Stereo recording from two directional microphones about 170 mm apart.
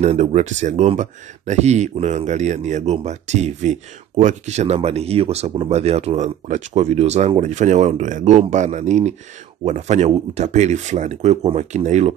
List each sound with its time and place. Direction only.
0.0 s speech: 40° right (ahead or behind)